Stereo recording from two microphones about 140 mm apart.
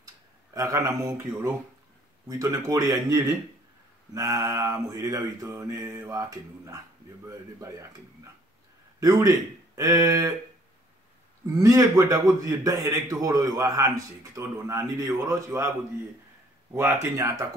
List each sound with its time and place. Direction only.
0.0 s a man's voice: 25° right (ahead or behind)
11.4 s a man's voice: 25° right (ahead or behind)
16.7 s speech: 15° right (ahead or behind)